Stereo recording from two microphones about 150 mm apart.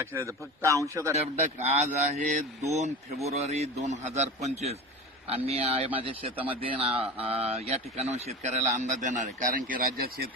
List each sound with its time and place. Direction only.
0.0 s a man's voice: 20° right (ahead or behind)
1.5 s speech: 50° right (ahead or behind); by 10.2 s 80° right